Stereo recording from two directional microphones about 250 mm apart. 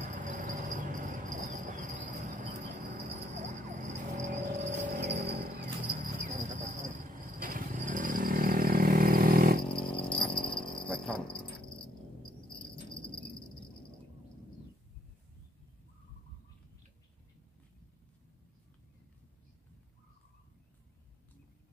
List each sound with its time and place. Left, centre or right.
0.0 s a sound: right
10.1 s dog: centre
10.9 s dog: centre